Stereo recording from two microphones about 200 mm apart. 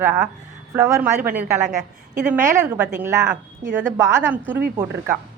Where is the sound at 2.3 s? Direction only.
10° right (ahead or behind).